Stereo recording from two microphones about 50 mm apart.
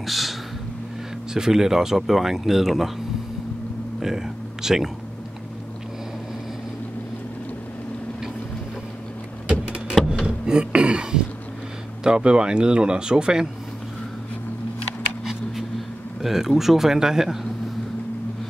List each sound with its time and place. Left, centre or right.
0.0 s a sound: centre
1.3 s speech: centre
4.0 s speech: centre
10.2 s a sound: centre
12.0 s speech: centre
16.2 s speech: centre